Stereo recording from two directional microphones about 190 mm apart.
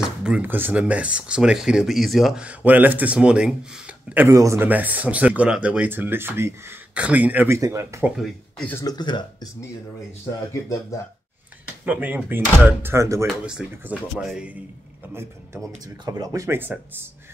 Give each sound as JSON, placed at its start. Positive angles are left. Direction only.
{"t": 0.0, "sound": "speech", "side_deg": -5}
{"t": 8.2, "sound": "speech", "side_deg": 5}
{"t": 8.8, "sound": "speech", "side_deg": 20}
{"t": 11.8, "sound": "speech", "side_deg": -10}
{"t": 16.1, "sound": "speech", "side_deg": -15}